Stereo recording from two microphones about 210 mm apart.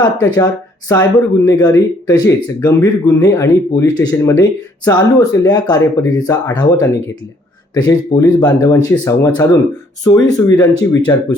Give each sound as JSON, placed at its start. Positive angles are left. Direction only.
{"t": 0.0, "sound": "speech", "side_deg": 20}